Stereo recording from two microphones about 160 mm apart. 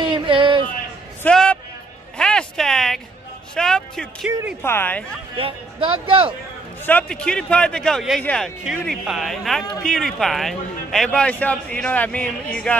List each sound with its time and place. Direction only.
0.0 s a sound: 30° right (ahead or behind)
1.2 s a sound: 5° left (ahead or behind)
3.5 s a man's voice: 5° left (ahead or behind)
4.6 s a man's voice: 15° left (ahead or behind)
5.4 s a man's voice: 35° right (ahead or behind)
6.9 s a man's voice: 10° left (ahead or behind)